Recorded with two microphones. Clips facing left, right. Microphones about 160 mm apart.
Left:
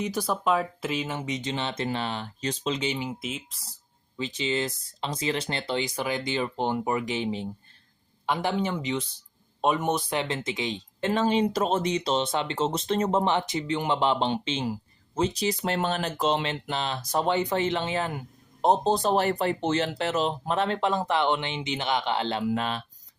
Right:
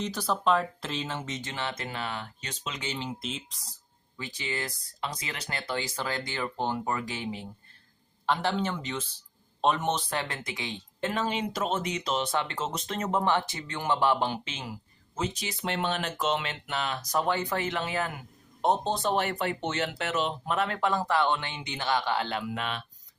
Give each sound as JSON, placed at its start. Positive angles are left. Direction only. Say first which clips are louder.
{"t": 0.0, "sound": "speech", "louder": "left 1 dB", "side_deg": 10}
{"t": 2.8, "sound": "speech", "louder": "left 4 dB", "side_deg": 10}
{"t": 4.2, "sound": "speech", "louder": "left 7 dB", "side_deg": 20}
{"t": 11.1, "sound": "speech", "louder": "left 8 dB", "side_deg": 30}